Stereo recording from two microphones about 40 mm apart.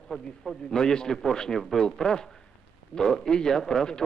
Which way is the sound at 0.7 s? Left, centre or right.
Centre.